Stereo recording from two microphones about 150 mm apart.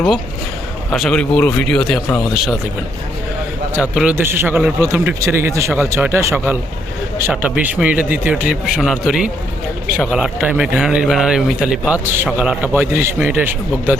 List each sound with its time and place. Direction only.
0.9 s a man's voice: 5° left (ahead or behind)
3.9 s speech: 10° right (ahead or behind)